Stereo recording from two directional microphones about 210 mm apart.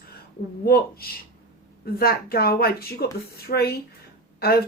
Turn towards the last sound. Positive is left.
turn(degrees=45)  # may be behind; listen again after turning